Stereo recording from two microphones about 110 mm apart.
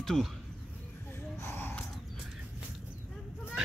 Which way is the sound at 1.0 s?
25° left (ahead or behind).